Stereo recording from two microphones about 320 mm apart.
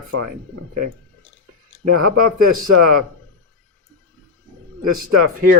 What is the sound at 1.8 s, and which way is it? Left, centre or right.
Speech, right.